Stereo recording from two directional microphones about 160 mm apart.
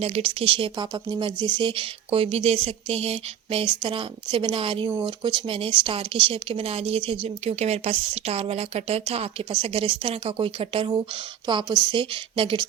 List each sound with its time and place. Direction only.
0.0 s speech: 40° right (ahead or behind)